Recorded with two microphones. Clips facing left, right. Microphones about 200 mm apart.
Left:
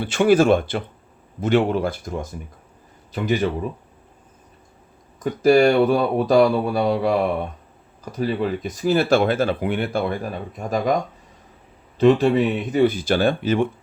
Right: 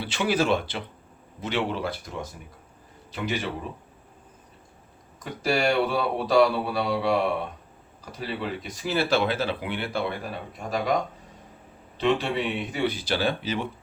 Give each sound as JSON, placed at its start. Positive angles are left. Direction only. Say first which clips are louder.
{"t": 0.0, "sound": "speech", "louder": "left 9 dB", "side_deg": 50}
{"t": 5.2, "sound": "speech", "louder": "left 10 dB", "side_deg": 50}
{"t": 11.9, "sound": "speech", "louder": "left 9 dB", "side_deg": 45}